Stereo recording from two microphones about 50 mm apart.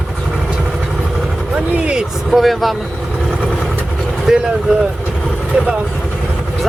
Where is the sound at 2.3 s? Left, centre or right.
Centre.